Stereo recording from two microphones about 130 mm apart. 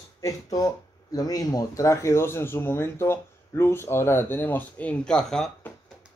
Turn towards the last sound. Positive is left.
turn(degrees=5)  # may be behind; listen again after turning